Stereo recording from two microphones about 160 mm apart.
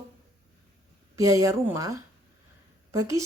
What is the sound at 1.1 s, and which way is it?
Speech, 20° right (ahead or behind).